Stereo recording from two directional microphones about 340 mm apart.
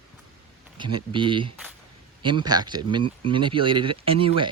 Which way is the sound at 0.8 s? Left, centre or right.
Centre.